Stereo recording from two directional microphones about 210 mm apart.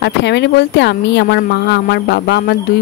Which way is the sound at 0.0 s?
55° left (ahead or behind).